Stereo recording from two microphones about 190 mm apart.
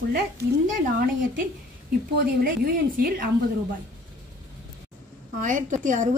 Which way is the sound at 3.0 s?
50° right (ahead or behind).